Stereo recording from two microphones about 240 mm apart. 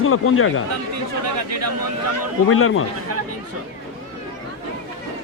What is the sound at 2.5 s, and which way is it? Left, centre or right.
Speech, left.